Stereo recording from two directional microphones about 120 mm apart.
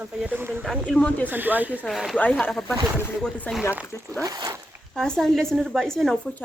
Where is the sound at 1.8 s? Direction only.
Centre (ahead or behind).